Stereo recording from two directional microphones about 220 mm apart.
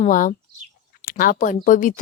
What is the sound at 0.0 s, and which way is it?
Speech, 35° left (ahead or behind).